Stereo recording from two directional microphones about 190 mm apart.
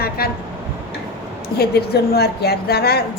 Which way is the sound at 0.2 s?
55° left (ahead or behind).